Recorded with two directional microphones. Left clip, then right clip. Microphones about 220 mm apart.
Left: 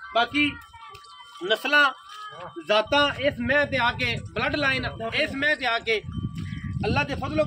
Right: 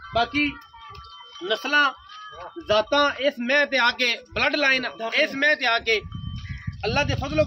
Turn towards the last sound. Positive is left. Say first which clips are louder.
# right 2 dB
turn(degrees=-25)  # may be behind; listen again after turning